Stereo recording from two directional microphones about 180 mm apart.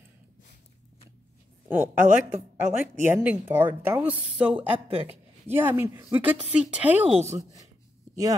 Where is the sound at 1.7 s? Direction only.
10° right (ahead or behind).